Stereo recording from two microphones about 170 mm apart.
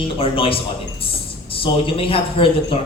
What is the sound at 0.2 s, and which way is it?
A man's voice, 35° left (ahead or behind).